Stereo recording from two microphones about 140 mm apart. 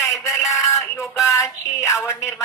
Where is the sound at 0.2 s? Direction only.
20° left (ahead or behind).